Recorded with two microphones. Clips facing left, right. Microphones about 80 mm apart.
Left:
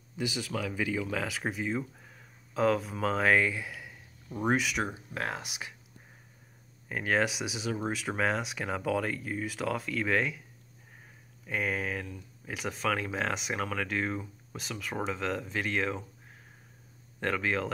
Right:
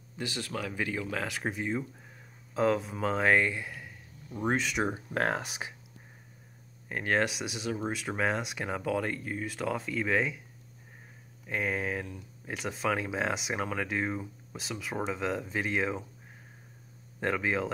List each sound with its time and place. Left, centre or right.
0.2 s speech: centre
5.1 s speech: right
6.9 s speech: centre
11.4 s speech: centre
17.2 s speech: centre